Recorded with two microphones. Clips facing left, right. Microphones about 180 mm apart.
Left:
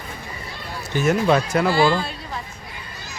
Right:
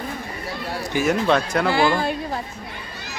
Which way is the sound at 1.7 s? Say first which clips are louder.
Even; 55° right (ahead or behind).